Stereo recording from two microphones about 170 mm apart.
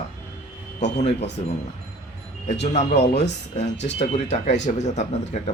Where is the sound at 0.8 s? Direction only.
40° left (ahead or behind).